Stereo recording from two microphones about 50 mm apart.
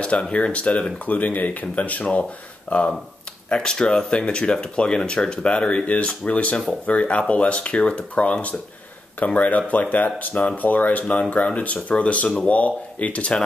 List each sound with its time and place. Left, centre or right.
0.0 s speech: left
2.7 s speech: centre